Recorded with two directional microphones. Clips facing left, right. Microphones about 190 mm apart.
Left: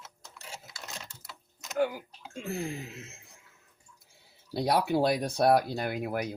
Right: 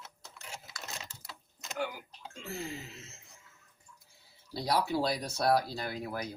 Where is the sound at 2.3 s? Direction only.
55° left (ahead or behind).